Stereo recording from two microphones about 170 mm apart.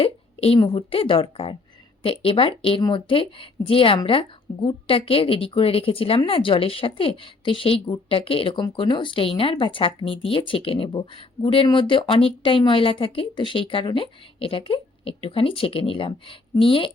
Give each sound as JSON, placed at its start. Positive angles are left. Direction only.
{"t": 0.0, "sound": "a woman's voice", "side_deg": 35}